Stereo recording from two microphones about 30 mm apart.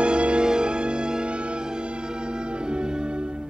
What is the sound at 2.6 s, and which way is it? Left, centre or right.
Music, right.